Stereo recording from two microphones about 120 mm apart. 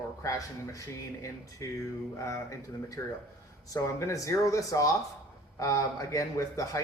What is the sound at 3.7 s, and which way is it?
A man's voice, 30° left (ahead or behind).